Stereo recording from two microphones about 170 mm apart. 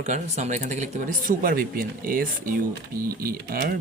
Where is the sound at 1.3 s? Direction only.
60° right (ahead or behind).